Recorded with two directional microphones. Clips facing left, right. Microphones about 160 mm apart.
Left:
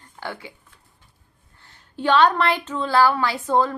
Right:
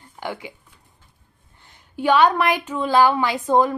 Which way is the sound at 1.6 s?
15° right (ahead or behind).